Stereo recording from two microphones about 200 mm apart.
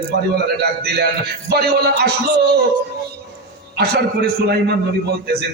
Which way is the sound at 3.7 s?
55° right (ahead or behind).